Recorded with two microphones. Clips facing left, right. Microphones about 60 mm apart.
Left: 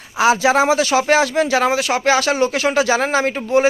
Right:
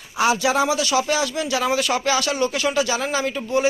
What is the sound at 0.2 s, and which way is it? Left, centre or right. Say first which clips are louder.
Speech: left 5 dB; left.